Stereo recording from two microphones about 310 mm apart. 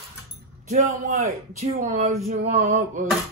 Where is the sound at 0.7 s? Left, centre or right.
Right.